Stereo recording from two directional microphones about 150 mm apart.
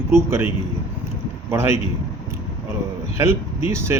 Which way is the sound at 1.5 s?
15° right (ahead or behind).